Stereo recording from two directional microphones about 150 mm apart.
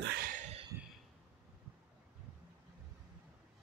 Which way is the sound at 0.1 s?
65° right (ahead or behind).